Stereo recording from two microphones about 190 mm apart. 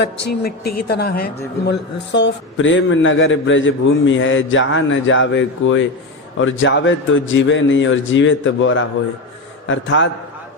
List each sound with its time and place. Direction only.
0.0 s a woman's voice: 55° left (ahead or behind); by 10.1 s 75° left (ahead or behind)